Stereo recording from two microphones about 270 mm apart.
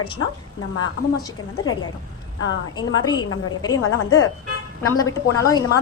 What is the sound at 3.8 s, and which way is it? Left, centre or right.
Speech, left.